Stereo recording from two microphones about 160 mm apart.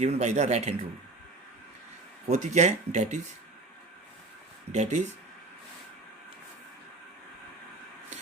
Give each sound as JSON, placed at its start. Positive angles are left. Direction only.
{"t": 0.0, "sound": "speech", "side_deg": -45}
{"t": 2.2, "sound": "speech", "side_deg": -45}
{"t": 4.7, "sound": "speech", "side_deg": -45}